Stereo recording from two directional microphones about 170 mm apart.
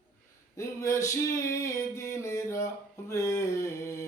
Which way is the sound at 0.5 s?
20° left (ahead or behind).